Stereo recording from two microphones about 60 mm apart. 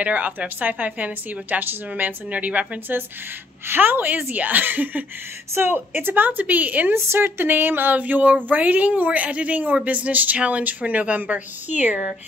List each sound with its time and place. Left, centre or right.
0.0 s a woman's voice: right
3.6 s a woman's voice: right
6.9 s a woman's voice: right